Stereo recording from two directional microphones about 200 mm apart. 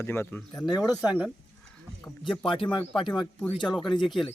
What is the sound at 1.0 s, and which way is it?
Speech, 5° right (ahead or behind).